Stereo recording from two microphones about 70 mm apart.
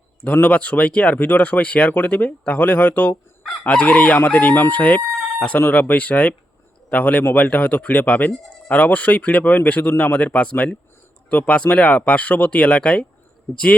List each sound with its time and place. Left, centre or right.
0.4 s speech: centre
13.5 s a man's voice: left